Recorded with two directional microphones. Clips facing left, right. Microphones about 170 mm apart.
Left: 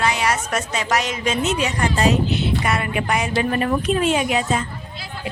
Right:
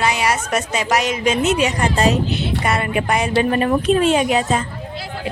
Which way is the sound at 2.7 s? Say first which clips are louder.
Right 3 dB; 30° right (ahead or behind).